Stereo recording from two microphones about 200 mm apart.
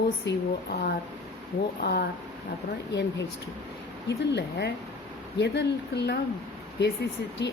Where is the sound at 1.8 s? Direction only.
50° left (ahead or behind).